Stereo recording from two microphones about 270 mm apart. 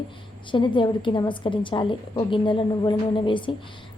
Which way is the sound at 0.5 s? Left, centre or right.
Centre.